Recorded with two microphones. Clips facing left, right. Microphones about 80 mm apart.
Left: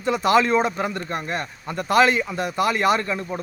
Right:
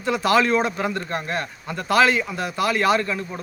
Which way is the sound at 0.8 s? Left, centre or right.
Centre.